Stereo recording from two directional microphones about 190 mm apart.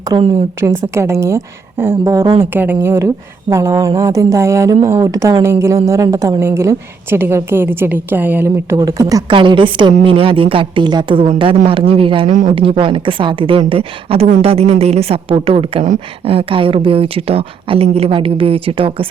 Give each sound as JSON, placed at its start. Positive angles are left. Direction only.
{"t": 0.0, "sound": "a woman's voice", "side_deg": -20}